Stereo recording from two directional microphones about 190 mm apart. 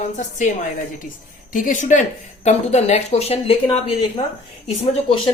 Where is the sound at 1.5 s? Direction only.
45° left (ahead or behind).